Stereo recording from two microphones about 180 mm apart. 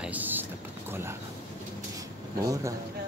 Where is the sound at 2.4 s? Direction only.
20° right (ahead or behind).